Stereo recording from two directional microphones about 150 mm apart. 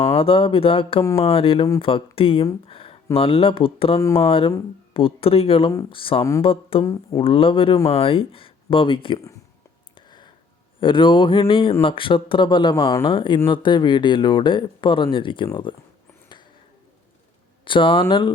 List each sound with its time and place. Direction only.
0.0 s speech: 40° left (ahead or behind)
2.6 s a sound: 40° left (ahead or behind)
3.2 s speech: 40° left (ahead or behind)
6.8 s speech: 20° left (ahead or behind)
7.2 s speech: 35° left (ahead or behind)
9.9 s a sound: 30° left (ahead or behind)
10.8 s speech: 35° left (ahead or behind)
17.7 s speech: 35° left (ahead or behind)